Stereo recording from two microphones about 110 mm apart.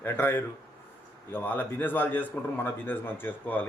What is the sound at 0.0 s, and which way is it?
A man's voice, 20° left (ahead or behind).